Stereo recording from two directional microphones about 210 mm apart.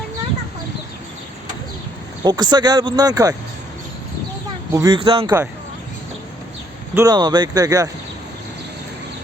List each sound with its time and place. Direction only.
2.2 s speech: 20° right (ahead or behind)
4.7 s speech: 20° right (ahead or behind)
6.9 s speech: 20° right (ahead or behind)